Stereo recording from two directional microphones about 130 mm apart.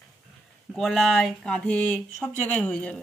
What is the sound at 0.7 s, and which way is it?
Speech, centre (ahead or behind).